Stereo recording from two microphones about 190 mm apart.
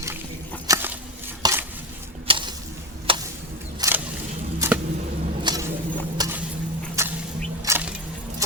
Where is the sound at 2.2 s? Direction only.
30° right (ahead or behind).